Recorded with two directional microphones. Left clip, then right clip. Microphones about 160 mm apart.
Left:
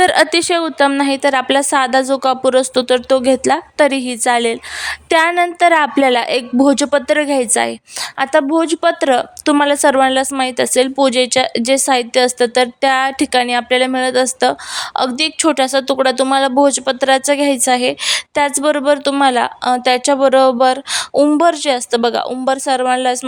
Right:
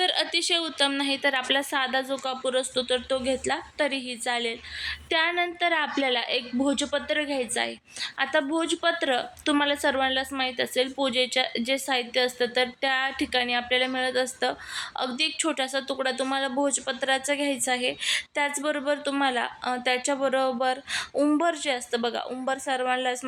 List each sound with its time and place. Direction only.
0.0 s a woman's voice: 90° left
8.2 s a woman's voice: 70° left (ahead or behind)
19.2 s a woman's voice: 85° left
20.1 s a woman's voice: 70° left (ahead or behind); by 22.3 s 90° left
22.3 s a woman's voice: 55° left (ahead or behind)